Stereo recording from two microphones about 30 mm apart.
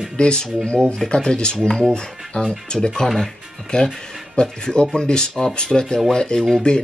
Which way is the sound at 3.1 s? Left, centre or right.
Centre.